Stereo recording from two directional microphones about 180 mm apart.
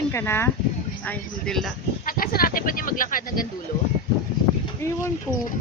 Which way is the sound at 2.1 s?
55° left (ahead or behind).